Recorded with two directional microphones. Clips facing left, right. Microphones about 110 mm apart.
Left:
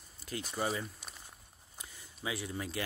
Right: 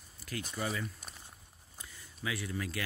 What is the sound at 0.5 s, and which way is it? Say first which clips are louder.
Speech: left 2 dB; 35° left (ahead or behind).